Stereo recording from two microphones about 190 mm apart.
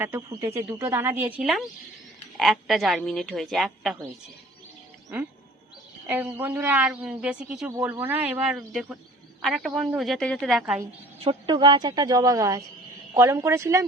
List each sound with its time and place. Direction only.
0.0 s a woman's voice: 10° right (ahead or behind)
6.1 s a woman's voice: 10° right (ahead or behind)
11.2 s a woman's voice: 30° right (ahead or behind)